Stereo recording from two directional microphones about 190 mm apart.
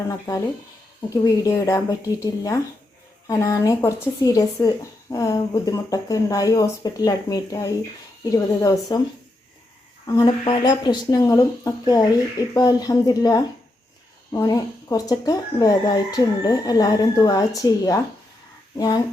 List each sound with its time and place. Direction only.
0.1 s a woman's voice: 15° left (ahead or behind)
10.1 s speech: 25° left (ahead or behind)